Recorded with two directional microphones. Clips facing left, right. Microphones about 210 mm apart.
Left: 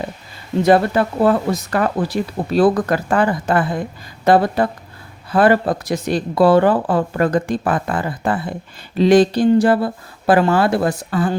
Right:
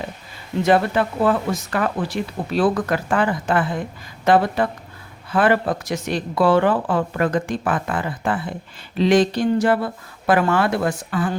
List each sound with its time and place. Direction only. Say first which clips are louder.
0.6 s speech: left 3 dB; 40° left (ahead or behind)